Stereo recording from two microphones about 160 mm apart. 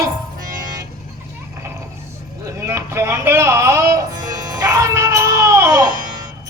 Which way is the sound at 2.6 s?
15° right (ahead or behind).